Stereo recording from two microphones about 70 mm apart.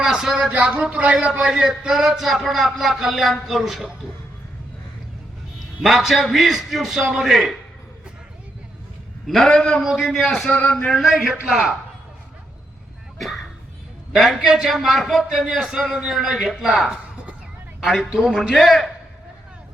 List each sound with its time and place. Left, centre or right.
0.0 s a man's voice: centre
5.8 s a man's voice: centre
9.2 s a man's voice: centre
9.8 s a man's voice: centre
10.2 s a man's voice: centre
10.8 s a man's voice: centre
13.1 s a sound: centre
14.1 s a man's voice: centre
16.9 s a sound: centre
17.8 s a man's voice: centre